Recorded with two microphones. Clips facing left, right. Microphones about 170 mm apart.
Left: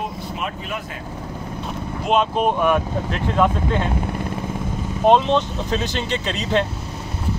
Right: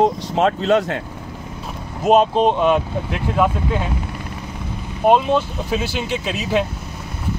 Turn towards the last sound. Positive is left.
turn(degrees=-10)  # may be behind; listen again after turning